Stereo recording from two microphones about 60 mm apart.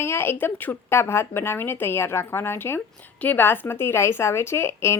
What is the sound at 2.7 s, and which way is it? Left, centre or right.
Speech, left.